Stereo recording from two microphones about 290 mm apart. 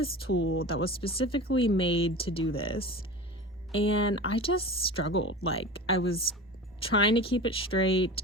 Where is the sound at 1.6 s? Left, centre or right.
Left.